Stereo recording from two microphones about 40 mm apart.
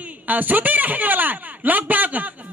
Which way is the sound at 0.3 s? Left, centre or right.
Right.